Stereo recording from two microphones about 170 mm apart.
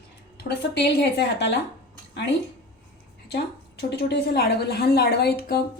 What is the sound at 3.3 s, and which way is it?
A woman's voice, 75° left (ahead or behind).